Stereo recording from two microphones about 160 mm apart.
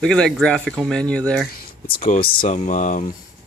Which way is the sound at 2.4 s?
50° left (ahead or behind).